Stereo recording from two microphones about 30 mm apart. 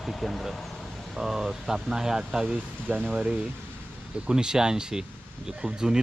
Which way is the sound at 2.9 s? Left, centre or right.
Left.